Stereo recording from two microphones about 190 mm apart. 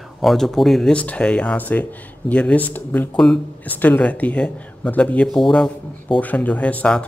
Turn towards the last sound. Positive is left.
turn(degrees=5)  # may be behind; listen again after turning